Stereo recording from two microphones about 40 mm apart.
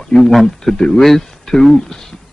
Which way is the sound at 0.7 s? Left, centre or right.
Left.